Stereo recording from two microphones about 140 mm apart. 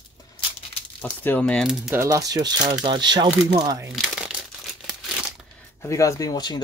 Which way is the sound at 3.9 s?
5° right (ahead or behind).